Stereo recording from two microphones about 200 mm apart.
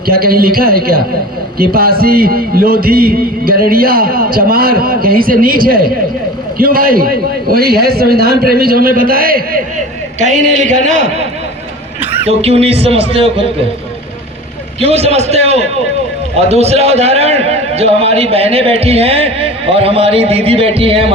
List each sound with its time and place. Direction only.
0.1 s a man's voice: 50° right (ahead or behind)
12.2 s a man's voice: 30° right (ahead or behind)
14.8 s a man's voice: 30° right (ahead or behind)